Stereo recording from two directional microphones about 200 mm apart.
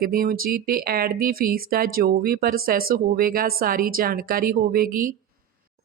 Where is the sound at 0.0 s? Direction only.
45° right (ahead or behind).